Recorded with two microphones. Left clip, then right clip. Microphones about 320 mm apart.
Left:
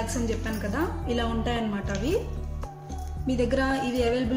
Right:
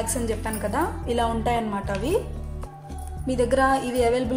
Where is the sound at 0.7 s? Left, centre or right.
Centre.